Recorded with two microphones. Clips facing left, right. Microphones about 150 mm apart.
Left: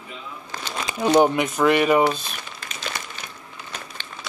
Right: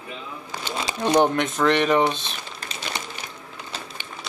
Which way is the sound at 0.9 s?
5° left (ahead or behind).